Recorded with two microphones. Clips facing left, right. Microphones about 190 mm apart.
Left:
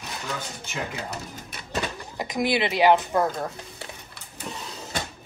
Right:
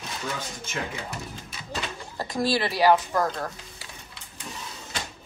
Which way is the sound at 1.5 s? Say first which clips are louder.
Even; 60° left (ahead or behind).